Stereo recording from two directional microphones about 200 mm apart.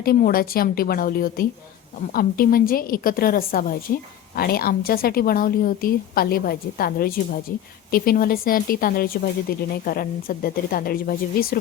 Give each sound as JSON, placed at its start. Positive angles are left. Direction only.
{"t": 0.0, "sound": "speech", "side_deg": 50}